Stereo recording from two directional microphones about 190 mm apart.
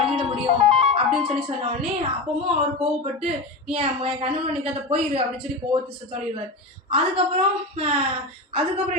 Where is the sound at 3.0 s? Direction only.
30° right (ahead or behind).